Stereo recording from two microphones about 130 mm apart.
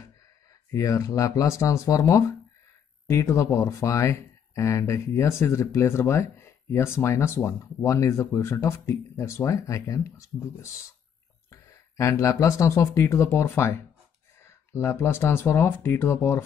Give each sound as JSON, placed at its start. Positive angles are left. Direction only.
{"t": 0.7, "sound": "speech", "side_deg": 25}